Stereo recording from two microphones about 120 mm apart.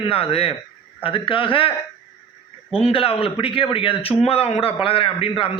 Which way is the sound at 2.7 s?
50° left (ahead or behind).